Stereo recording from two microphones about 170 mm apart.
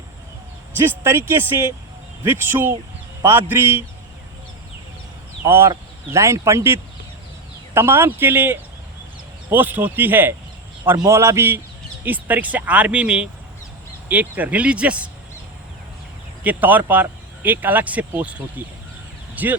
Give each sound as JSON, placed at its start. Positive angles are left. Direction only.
{"t": 0.9, "sound": "a man's voice", "side_deg": -15}
{"t": 5.5, "sound": "speech", "side_deg": -15}
{"t": 16.4, "sound": "speech", "side_deg": -10}